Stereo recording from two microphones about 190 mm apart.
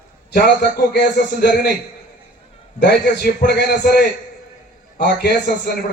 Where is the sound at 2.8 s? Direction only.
55° left (ahead or behind).